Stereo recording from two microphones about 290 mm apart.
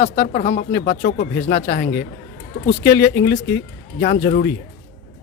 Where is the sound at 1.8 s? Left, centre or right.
Left.